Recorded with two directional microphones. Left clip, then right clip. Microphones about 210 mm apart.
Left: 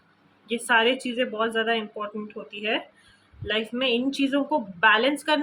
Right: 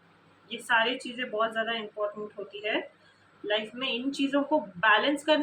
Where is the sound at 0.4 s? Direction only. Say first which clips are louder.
Left 5 dB; 55° left (ahead or behind).